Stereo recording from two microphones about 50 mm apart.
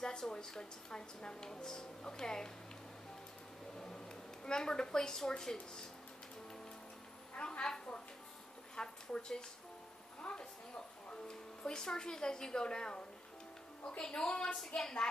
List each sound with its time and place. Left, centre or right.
0.0 s a woman's voice: centre
4.5 s a woman's voice: centre
7.3 s a sound: left
11.1 s a woman's voice: centre